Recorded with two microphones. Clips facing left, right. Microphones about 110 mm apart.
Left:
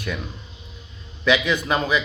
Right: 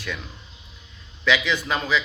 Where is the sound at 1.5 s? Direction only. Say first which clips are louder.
Left 3 dB; 20° left (ahead or behind).